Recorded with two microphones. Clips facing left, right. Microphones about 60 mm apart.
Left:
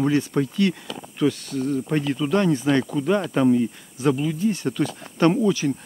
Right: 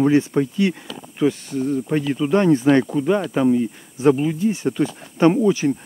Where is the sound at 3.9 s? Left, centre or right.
Right.